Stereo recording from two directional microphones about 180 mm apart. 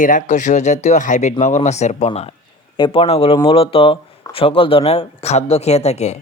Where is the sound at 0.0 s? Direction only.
45° left (ahead or behind).